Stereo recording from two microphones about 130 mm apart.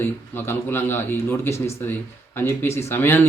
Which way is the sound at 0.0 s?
15° left (ahead or behind).